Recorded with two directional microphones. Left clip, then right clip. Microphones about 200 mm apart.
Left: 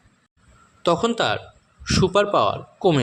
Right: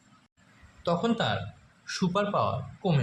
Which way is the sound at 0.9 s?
40° left (ahead or behind).